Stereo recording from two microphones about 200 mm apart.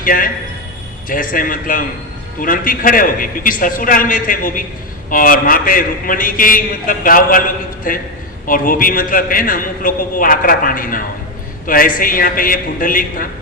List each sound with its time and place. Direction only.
0.0 s a man's voice: 45° left (ahead or behind)